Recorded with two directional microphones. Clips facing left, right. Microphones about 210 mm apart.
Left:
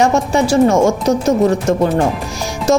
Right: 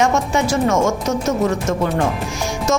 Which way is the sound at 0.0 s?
35° left (ahead or behind).